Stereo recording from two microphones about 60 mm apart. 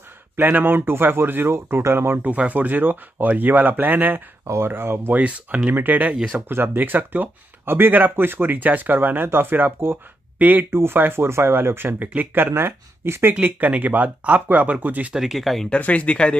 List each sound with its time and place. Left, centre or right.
0.4 s speech: right
2.2 s speech: right
5.2 s speech: right
10.7 s speech: right
13.3 s speech: right
15.1 s speech: centre
15.8 s speech: left